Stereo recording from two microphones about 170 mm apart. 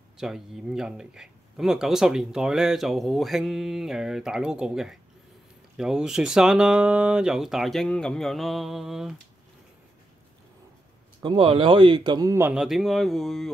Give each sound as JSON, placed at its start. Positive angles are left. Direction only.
{"t": 0.2, "sound": "speech", "side_deg": 0}
{"t": 11.2, "sound": "speech", "side_deg": -30}
{"t": 12.6, "sound": "speech", "side_deg": 0}